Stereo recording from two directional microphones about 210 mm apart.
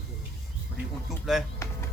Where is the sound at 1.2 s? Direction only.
Centre (ahead or behind).